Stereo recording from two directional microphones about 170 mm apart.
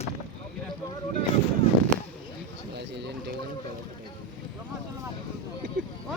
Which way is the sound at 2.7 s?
80° right.